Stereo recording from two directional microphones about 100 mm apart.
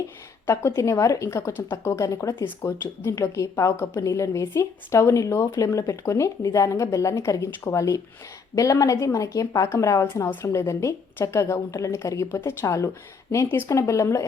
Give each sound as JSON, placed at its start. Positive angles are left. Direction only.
{"t": 0.4, "sound": "speech", "side_deg": 25}